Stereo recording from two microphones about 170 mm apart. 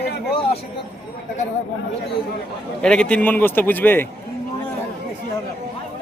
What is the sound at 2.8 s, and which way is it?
A man's voice, 5° left (ahead or behind).